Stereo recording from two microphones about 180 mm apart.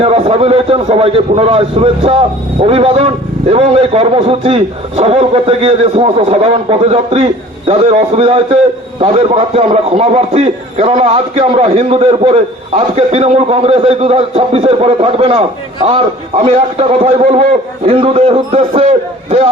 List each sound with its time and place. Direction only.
0.0 s a man's voice: 35° right (ahead or behind)